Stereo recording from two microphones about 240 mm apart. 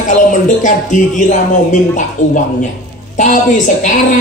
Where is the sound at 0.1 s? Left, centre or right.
Left.